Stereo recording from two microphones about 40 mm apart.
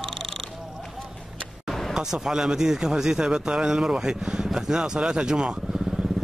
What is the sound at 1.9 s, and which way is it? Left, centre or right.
Speech, centre.